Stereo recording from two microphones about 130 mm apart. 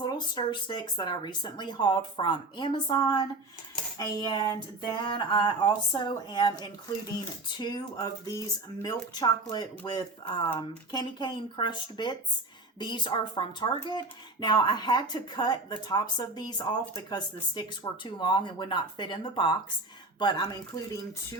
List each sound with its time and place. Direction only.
0.0 s speech: 35° left (ahead or behind)